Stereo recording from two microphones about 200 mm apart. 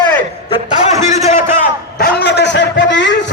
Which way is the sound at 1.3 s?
40° left (ahead or behind).